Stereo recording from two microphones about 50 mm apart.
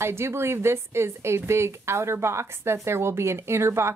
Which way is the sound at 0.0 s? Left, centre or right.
Right.